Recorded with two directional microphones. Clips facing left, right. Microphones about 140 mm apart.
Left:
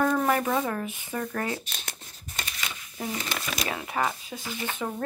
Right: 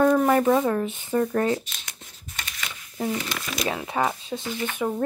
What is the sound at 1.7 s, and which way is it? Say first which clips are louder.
Shuffling cards: left 2 dB; 50° left (ahead or behind).